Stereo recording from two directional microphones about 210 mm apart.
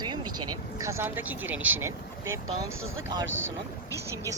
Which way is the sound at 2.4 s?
85° right.